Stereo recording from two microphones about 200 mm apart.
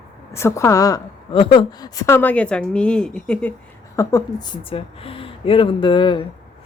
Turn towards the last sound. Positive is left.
turn(degrees=25)  # may be behind; listen again after turning